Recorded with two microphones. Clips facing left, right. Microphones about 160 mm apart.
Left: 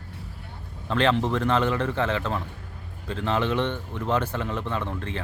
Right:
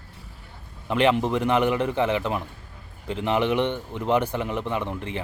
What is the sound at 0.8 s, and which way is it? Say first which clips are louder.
Speech: right 2 dB; 15° right (ahead or behind).